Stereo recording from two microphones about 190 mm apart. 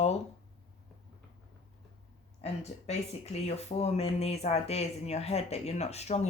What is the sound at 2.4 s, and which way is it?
Speech, 35° left (ahead or behind).